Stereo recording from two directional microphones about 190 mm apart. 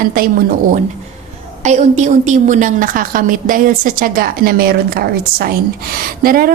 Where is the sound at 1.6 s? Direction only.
35° right (ahead or behind).